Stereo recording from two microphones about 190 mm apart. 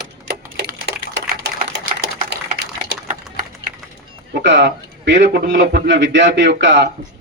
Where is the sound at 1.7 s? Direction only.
65° right (ahead or behind).